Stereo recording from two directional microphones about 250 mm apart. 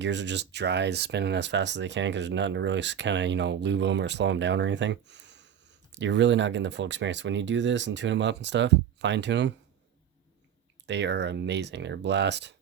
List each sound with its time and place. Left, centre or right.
0.0 s speech: right
10.8 s speech: right